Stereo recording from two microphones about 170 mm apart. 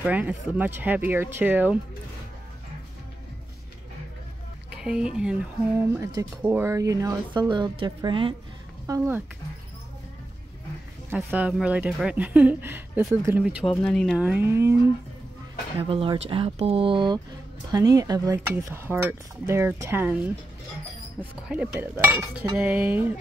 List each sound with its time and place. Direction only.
0.0 s cutlery: 5° right (ahead or behind)
4.8 s speech: 5° right (ahead or behind)
5.9 s speech: 20° right (ahead or behind)
8.8 s speech: 15° right (ahead or behind)
11.1 s cutlery: 10° right (ahead or behind)
13.8 s speech: 5° left (ahead or behind); by 14.8 s 15° right (ahead or behind)
15.8 s speech: 35° right (ahead or behind)
17.6 s cutlery: 20° right (ahead or behind)